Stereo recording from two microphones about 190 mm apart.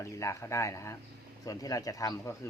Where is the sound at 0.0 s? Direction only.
15° left (ahead or behind).